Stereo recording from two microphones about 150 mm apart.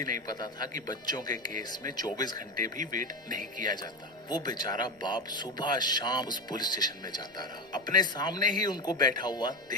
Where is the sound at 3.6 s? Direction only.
30° left (ahead or behind).